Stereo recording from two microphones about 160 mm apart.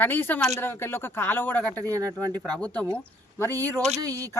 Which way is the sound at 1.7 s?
20° right (ahead or behind).